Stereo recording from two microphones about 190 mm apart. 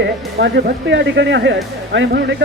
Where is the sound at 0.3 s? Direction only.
65° right (ahead or behind).